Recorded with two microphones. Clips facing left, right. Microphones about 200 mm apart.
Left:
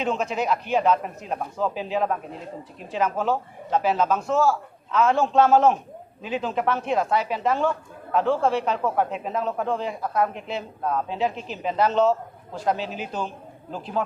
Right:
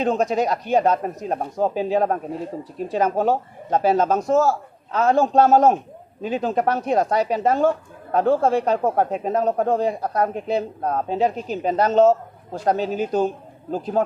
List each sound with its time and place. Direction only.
0.0 s speech: 40° right (ahead or behind)